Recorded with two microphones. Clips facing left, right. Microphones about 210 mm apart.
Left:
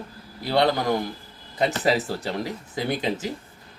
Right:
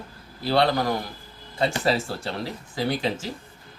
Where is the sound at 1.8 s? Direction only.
15° left (ahead or behind).